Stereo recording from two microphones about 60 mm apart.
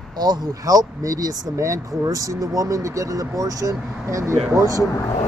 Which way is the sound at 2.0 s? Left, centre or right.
Right.